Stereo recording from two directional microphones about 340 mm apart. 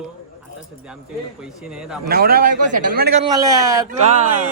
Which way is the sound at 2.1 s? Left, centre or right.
Right.